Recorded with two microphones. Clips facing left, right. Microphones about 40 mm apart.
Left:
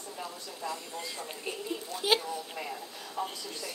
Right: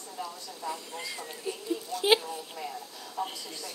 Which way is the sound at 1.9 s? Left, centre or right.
Left.